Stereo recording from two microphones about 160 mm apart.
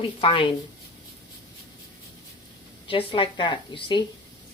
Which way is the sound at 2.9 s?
35° left (ahead or behind).